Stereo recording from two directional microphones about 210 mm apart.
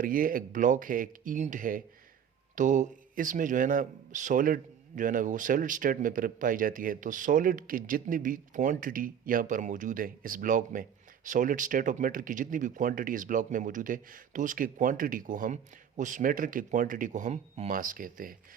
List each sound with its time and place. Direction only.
0.0 s a man's voice: 40° right (ahead or behind)